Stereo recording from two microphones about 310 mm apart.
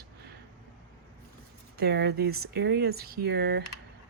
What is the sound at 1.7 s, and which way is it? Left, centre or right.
Speech, right.